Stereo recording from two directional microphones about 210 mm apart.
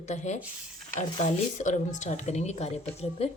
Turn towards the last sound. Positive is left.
turn(degrees=30)  # may be behind; listen again after turning